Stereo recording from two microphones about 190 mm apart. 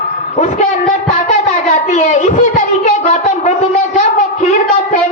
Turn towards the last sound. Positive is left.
turn(degrees=40)  # may be behind; listen again after turning